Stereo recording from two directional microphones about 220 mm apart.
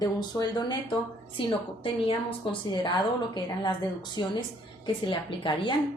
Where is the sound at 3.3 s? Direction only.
20° left (ahead or behind).